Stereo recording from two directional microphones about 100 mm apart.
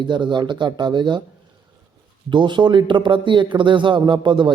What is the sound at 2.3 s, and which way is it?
Speech, 50° right (ahead or behind).